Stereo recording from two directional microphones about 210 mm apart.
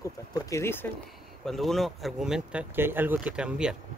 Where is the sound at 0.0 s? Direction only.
15° left (ahead or behind).